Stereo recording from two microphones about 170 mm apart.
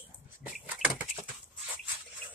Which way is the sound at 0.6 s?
10° right (ahead or behind).